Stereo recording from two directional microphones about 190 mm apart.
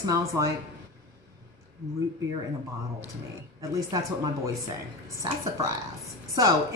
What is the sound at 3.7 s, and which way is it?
Speech, 15° right (ahead or behind).